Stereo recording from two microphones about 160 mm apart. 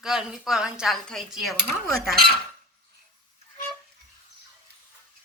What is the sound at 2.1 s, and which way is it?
Cutlery, 80° right.